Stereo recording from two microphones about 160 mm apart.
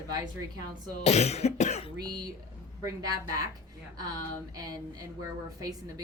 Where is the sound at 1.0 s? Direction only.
40° left (ahead or behind).